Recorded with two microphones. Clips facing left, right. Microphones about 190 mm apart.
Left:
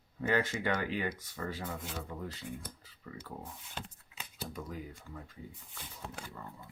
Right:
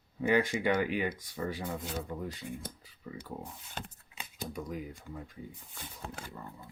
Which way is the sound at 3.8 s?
50° right (ahead or behind).